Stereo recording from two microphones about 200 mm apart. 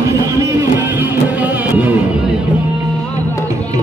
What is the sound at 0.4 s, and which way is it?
Music, 10° right (ahead or behind).